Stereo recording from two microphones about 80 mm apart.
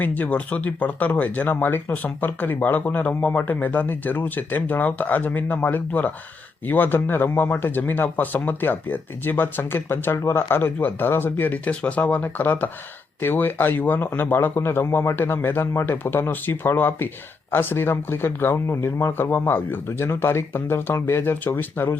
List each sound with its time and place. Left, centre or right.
0.0 s speech: left